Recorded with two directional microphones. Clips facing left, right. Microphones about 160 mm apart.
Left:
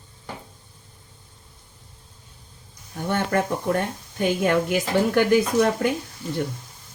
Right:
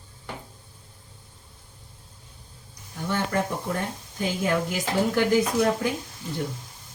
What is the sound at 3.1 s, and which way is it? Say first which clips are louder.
A woman's voice: left 3 dB; 60° left (ahead or behind).